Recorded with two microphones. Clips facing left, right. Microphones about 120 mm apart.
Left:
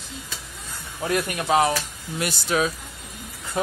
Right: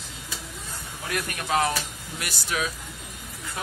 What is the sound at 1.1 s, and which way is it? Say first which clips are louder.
Speech: left 5 dB; 20° left (ahead or behind).